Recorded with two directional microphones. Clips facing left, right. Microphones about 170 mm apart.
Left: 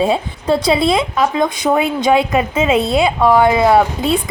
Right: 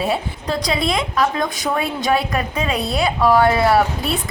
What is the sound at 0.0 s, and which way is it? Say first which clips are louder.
A woman's voice: left 5 dB; 25° left (ahead or behind).